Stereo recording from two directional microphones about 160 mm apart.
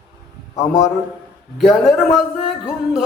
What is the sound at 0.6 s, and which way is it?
Speech, 20° left (ahead or behind).